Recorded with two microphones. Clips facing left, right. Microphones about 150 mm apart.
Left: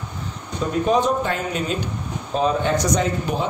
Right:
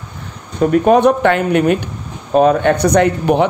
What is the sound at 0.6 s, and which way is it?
A man's voice, 65° right (ahead or behind).